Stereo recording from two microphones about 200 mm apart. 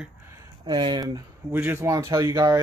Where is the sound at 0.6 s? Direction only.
25° right (ahead or behind).